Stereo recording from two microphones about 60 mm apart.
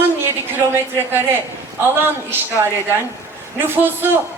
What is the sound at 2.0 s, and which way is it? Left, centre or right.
Speech, right.